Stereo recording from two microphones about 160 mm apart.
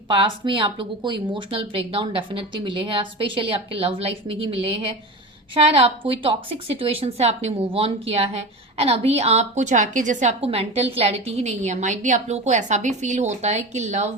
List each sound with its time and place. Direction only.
0.1 s a woman's voice: 30° right (ahead or behind)